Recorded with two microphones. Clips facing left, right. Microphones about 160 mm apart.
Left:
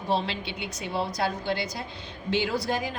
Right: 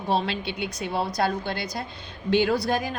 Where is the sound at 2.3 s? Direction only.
55° right (ahead or behind).